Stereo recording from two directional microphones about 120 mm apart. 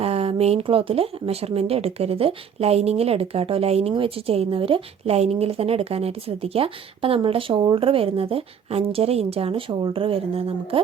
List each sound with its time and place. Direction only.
0.0 s speech: 55° right (ahead or behind)